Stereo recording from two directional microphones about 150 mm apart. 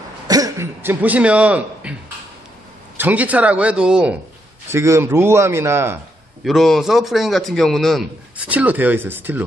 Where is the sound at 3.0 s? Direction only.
10° right (ahead or behind).